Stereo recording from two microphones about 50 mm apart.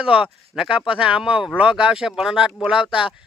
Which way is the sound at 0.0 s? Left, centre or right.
Centre.